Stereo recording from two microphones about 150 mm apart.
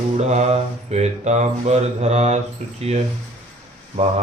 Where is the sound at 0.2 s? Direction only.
50° right (ahead or behind).